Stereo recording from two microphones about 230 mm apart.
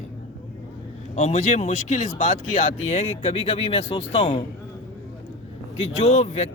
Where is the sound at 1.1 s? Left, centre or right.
Left.